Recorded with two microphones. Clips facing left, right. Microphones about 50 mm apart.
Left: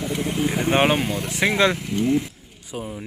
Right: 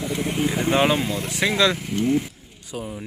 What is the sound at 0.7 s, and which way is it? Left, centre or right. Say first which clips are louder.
Speech: left 1 dB; left.